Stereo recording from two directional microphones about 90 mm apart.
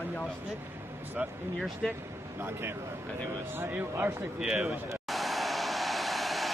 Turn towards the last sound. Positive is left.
turn(degrees=0)  # may be behind; listen again after turning